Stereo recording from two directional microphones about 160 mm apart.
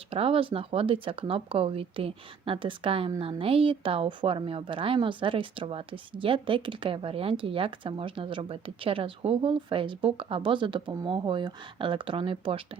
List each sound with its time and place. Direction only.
0.1 s a woman's voice: 35° right (ahead or behind)